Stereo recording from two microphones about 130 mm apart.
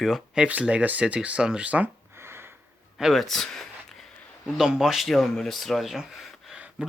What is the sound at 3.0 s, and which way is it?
Speech, centre (ahead or behind).